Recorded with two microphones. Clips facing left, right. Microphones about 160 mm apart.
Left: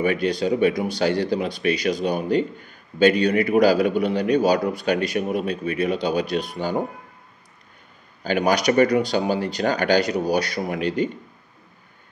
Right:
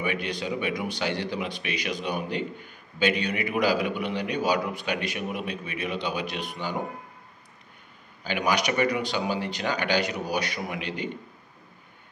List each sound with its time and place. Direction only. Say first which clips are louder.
0.0 s a man's voice: left 8 dB; 40° left (ahead or behind)
8.2 s a man's voice: left 6 dB; 40° left (ahead or behind)